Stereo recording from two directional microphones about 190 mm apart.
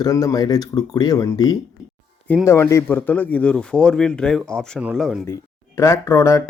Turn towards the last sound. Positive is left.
turn(degrees=15)  # may be behind; listen again after turning